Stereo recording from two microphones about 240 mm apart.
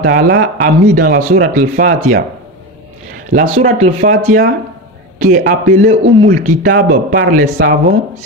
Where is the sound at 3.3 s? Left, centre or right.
Right.